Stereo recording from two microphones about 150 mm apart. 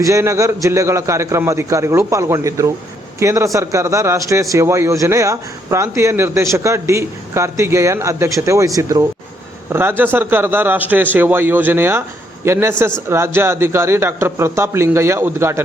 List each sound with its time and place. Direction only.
0.0 s a man's voice: 20° right (ahead or behind)